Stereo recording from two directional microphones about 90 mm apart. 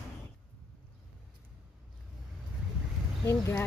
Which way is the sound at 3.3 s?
25° left (ahead or behind).